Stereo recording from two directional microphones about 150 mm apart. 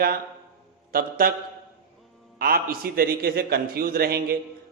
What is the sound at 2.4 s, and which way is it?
A man's voice, 80° right.